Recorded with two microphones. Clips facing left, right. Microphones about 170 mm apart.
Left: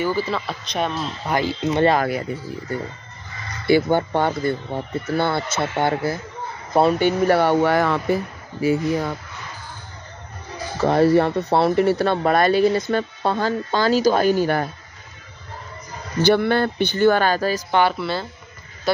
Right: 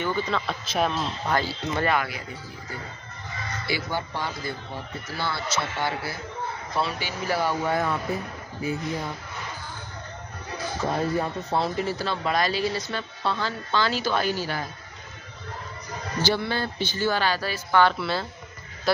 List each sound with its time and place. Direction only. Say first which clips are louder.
0.0 s speech: left 4 dB; 5° left (ahead or behind)
1.2 s speech: left 5 dB; 15° left (ahead or behind)
1.7 s speech: left 8 dB; 30° left (ahead or behind)
3.6 s speech: left 13 dB; 55° left (ahead or behind); by 9.1 s 85° left
10.8 s speech: left 11 dB; 80° left; by 14.7 s 55° left (ahead or behind)
16.2 s speech: left 9 dB; 60° left (ahead or behind)
17.9 s speech: left 3 dB; centre (ahead or behind)